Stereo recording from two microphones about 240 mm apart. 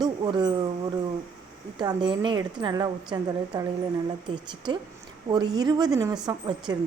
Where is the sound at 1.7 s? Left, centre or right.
Centre.